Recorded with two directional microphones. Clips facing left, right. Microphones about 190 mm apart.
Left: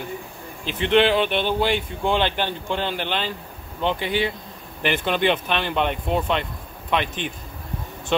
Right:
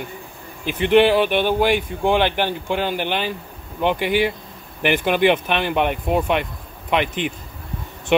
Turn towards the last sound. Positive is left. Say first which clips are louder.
# right 3 dB
turn(degrees=-15)  # may be behind; listen again after turning